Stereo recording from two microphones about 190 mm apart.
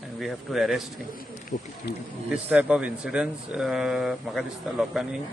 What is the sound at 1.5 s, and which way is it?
Speech, 40° left (ahead or behind).